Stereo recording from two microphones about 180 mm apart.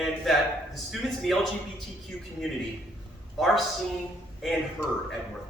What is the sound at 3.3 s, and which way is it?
Speech, centre (ahead or behind).